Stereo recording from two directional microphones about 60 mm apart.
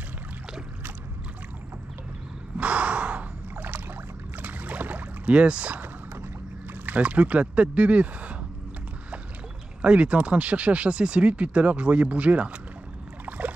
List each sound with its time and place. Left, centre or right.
2.5 s gasp: right
4.4 s rowboat: right
6.7 s speech: right
9.8 s speech: centre